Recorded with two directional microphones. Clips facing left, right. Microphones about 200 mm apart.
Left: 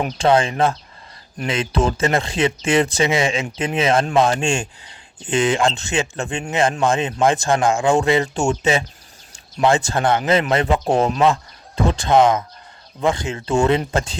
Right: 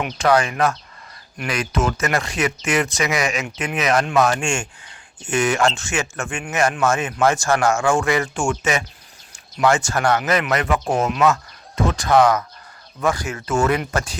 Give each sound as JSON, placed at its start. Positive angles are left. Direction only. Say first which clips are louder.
{"t": 0.0, "sound": "speech", "louder": "left 2 dB", "side_deg": 25}
{"t": 5.3, "sound": "speech", "louder": "left 1 dB", "side_deg": 20}